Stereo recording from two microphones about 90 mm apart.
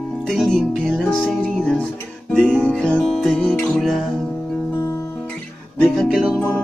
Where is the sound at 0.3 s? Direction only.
Centre (ahead or behind).